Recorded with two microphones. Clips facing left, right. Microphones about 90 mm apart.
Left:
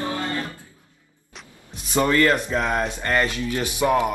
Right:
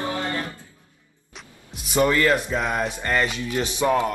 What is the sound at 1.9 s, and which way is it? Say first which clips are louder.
Speech: even; 15° right (ahead or behind).